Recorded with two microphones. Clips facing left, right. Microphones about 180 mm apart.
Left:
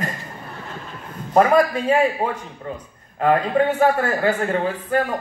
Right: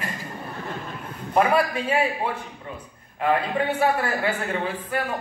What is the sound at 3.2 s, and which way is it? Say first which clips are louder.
A man's voice: left 5 dB; 45° left (ahead or behind).